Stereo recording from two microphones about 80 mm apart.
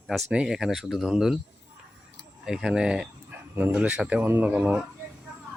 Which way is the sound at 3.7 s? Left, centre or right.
Centre.